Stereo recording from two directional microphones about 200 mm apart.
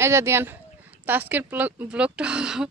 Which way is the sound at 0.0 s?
15° right (ahead or behind).